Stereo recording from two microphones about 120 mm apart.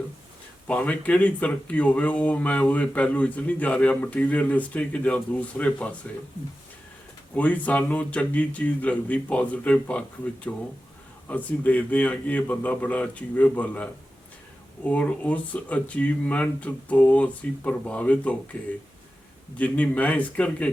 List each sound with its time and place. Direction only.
0.7 s speech: 10° left (ahead or behind)
7.3 s speech: 15° left (ahead or behind)
11.3 s speech: 15° left (ahead or behind)
19.5 s speech: 10° left (ahead or behind)